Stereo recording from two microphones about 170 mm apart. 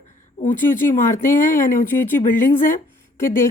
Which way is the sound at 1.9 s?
15° left (ahead or behind).